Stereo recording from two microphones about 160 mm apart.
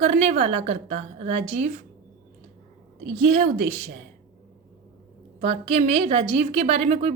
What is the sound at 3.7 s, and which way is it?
Speech, 50° right (ahead or behind).